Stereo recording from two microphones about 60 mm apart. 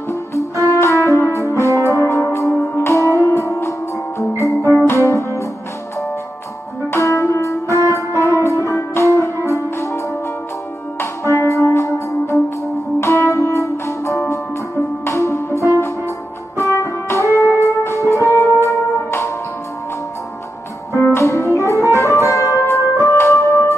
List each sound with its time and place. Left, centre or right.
0.7 s brass instrument: left
2.5 s music: left
2.9 s music: left
7.0 s music: left
11.2 s music: left
20.9 s music: left
23.2 s keyboard: left